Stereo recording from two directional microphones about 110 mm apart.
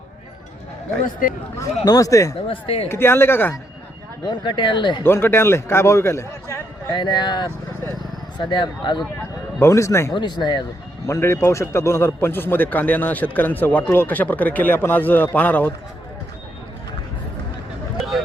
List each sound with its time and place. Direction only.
1.8 s speech: 35° left (ahead or behind)
2.5 s speech: 55° left (ahead or behind)
2.9 s a man's voice: 20° left (ahead or behind)
4.3 s speech: 45° left (ahead or behind)
5.0 s a man's voice: 20° left (ahead or behind)
6.9 s speech: 45° left (ahead or behind)
9.6 s a man's voice: 25° left (ahead or behind)
10.2 s speech: 45° left (ahead or behind)
11.0 s a man's voice: 25° left (ahead or behind)
17.9 s vehicle: centre (ahead or behind)